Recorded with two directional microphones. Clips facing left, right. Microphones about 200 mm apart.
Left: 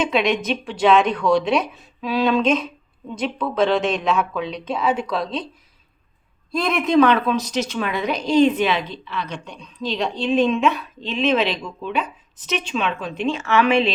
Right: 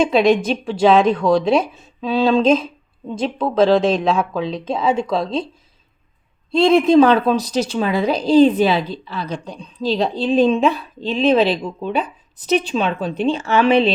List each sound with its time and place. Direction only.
0.1 s speech: 35° right (ahead or behind)
6.5 s a woman's voice: 30° right (ahead or behind)